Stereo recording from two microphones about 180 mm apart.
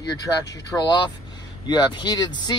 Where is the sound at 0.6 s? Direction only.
25° left (ahead or behind).